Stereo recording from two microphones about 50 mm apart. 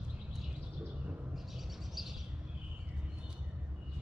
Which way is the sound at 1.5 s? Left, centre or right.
Centre.